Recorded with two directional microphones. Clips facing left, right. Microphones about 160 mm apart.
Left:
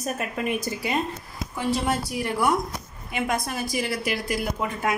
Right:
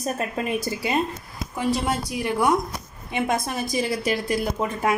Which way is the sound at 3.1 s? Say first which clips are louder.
Right 2 dB; 25° right (ahead or behind).